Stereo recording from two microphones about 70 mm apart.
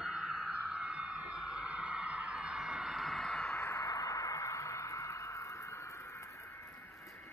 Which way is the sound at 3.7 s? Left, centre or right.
Left.